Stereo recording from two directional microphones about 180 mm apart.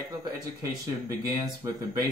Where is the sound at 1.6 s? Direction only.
15° right (ahead or behind).